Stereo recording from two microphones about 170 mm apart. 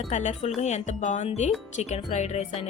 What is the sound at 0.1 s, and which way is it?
Speech, 45° left (ahead or behind).